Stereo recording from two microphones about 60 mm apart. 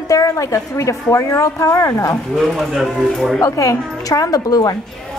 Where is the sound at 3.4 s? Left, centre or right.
Left.